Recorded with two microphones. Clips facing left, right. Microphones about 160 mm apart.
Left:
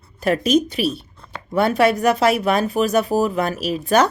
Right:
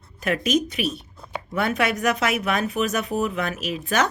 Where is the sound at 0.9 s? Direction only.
10° right (ahead or behind).